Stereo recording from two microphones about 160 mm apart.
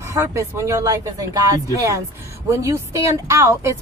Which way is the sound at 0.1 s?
20° right (ahead or behind).